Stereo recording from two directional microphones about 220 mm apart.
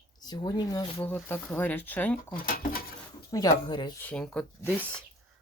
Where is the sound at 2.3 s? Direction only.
40° left (ahead or behind).